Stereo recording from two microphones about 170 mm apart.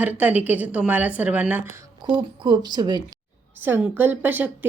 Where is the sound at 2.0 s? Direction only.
30° right (ahead or behind).